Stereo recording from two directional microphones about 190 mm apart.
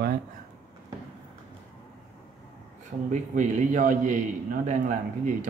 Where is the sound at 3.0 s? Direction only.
40° right (ahead or behind).